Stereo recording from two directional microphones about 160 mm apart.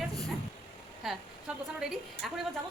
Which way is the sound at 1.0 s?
Centre (ahead or behind).